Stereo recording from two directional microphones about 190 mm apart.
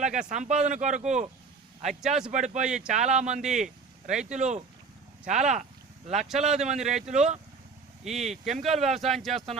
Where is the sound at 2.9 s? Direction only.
40° right (ahead or behind).